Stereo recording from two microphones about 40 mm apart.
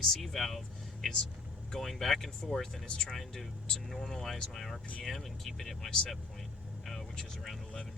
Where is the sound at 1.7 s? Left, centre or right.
Centre.